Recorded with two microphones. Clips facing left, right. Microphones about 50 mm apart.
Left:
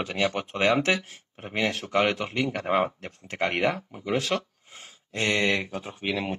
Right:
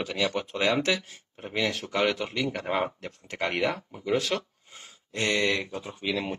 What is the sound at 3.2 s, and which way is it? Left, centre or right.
Speech, left.